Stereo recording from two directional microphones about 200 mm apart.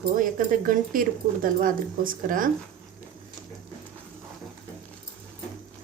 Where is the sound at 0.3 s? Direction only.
45° right (ahead or behind).